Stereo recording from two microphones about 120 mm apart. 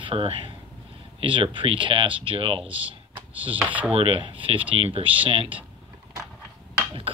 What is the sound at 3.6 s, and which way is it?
Speech, 10° right (ahead or behind).